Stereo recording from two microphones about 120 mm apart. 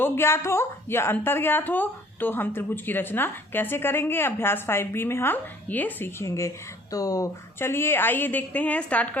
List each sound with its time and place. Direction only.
0.0 s a woman's voice: 20° left (ahead or behind)